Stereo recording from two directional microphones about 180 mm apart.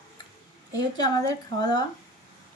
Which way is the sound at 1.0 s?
20° left (ahead or behind).